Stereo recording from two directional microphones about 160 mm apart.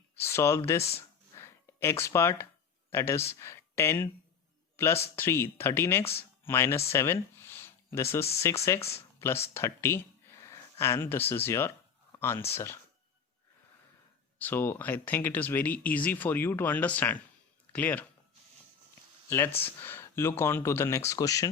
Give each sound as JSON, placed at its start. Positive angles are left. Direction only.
{"t": 0.2, "sound": "speech", "side_deg": 15}
{"t": 0.8, "sound": "speech", "side_deg": 40}
{"t": 1.4, "sound": "a sound", "side_deg": 15}
{"t": 2.9, "sound": "speech", "side_deg": 15}
{"t": 5.1, "sound": "speech", "side_deg": 15}
{"t": 6.9, "sound": "a sound", "side_deg": 15}
{"t": 8.4, "sound": "speech", "side_deg": 15}
{"t": 9.0, "sound": "a sound", "side_deg": 15}
{"t": 9.6, "sound": "speech", "side_deg": 15}
{"t": 14.3, "sound": "speech", "side_deg": 10}
{"t": 19.3, "sound": "speech", "side_deg": 15}